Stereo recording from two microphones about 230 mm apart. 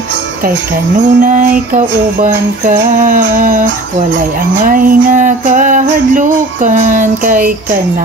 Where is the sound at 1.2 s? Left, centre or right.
Right.